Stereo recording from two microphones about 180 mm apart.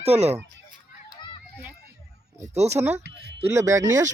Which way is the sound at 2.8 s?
15° right (ahead or behind).